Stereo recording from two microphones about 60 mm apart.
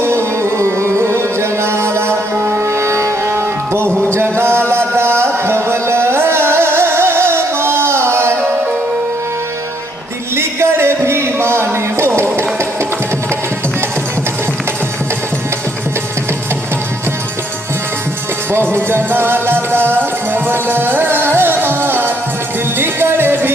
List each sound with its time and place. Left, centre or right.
0.0 s music: right
4.7 s a sound: right
5.2 s music: right
10.3 s music: right
18.7 s music: right